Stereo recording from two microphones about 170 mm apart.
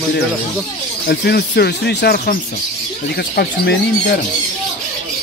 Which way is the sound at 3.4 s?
70° left (ahead or behind).